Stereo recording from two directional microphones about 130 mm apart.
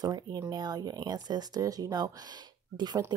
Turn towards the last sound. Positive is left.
turn(degrees=-30)  # may be behind; listen again after turning